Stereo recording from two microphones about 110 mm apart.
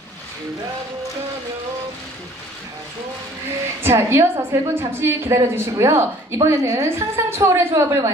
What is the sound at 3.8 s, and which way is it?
A woman's voice, 25° right (ahead or behind).